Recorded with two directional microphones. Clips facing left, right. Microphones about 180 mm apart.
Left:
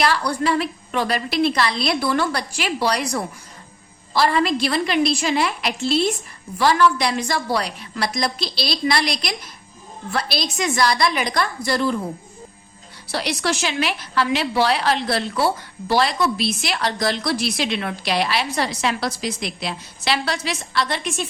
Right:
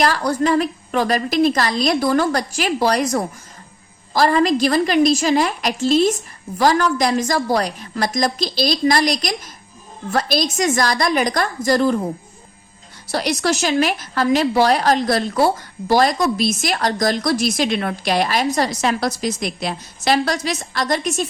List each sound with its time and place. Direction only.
0.0 s a woman's voice: 45° right (ahead or behind)
13.1 s a woman's voice: 45° right (ahead or behind)